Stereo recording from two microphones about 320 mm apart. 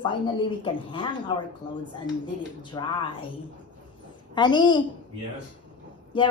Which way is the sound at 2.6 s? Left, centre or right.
Centre.